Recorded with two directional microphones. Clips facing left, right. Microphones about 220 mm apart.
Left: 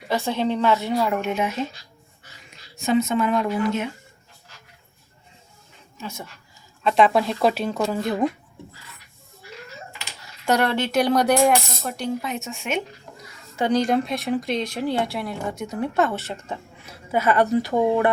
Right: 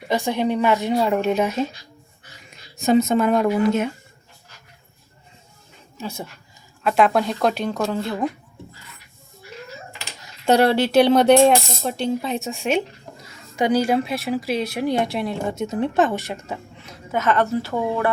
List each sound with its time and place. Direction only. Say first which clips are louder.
0.1 s speech: right 2 dB; 15° right (ahead or behind); by 1.6 s 40° right (ahead or behind)
2.7 s a woman's voice: right 4 dB; 40° right (ahead or behind)
6.0 s speech: right 4 dB; 30° right (ahead or behind)
6.8 s speech: even; centre (ahead or behind)
7.9 s a woman's voice: left 1 dB; 20° left (ahead or behind)
10.2 s speech: right 5 dB; 25° right (ahead or behind)
13.6 s speech: right 2 dB; 10° right (ahead or behind)
17.1 s a woman's voice: left 1 dB; 10° left (ahead or behind)